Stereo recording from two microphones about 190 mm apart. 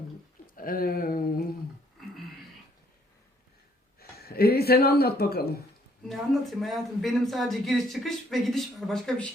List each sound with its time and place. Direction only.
0.4 s a sound: 50° left (ahead or behind)
4.2 s a man's voice: 55° left (ahead or behind)
6.1 s a man's voice: centre (ahead or behind)